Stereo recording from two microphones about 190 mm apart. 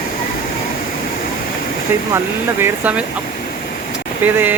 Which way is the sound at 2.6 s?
10° right (ahead or behind).